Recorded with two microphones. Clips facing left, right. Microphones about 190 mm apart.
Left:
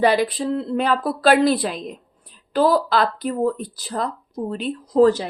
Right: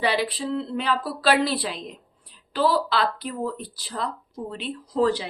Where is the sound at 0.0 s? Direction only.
45° left (ahead or behind).